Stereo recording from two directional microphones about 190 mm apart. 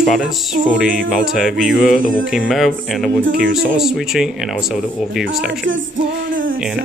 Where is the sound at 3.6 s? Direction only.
Centre (ahead or behind).